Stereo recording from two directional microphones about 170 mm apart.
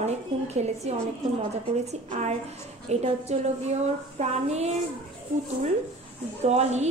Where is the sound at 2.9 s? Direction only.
40° right (ahead or behind).